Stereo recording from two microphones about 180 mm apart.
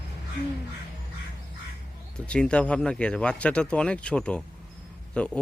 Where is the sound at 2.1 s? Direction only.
5° left (ahead or behind).